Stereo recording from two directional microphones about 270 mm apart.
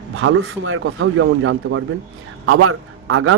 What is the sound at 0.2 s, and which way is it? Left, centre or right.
A man's voice, right.